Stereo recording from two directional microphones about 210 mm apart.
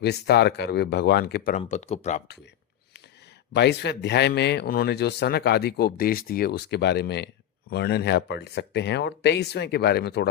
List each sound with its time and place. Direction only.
0.0 s speech: 50° left (ahead or behind); by 2.2 s 30° left (ahead or behind)
3.5 s speech: 55° left (ahead or behind)